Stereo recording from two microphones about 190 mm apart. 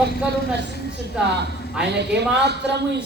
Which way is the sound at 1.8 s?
65° right (ahead or behind).